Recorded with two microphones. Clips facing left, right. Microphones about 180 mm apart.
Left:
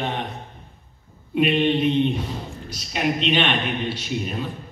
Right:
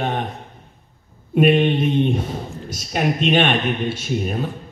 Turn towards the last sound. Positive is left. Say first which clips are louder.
# right 4 dB
turn(degrees=-45)  # may be behind; listen again after turning